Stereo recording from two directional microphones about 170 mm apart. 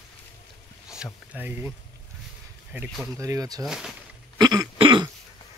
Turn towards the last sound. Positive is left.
turn(degrees=-25)  # may be behind; listen again after turning